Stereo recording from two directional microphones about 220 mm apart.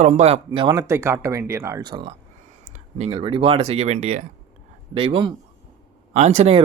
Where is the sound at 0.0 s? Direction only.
30° right (ahead or behind).